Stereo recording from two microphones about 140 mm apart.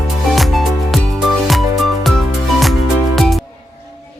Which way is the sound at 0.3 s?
Centre (ahead or behind).